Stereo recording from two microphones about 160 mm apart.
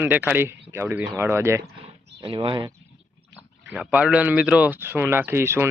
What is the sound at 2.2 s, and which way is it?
Speech, 30° right (ahead or behind).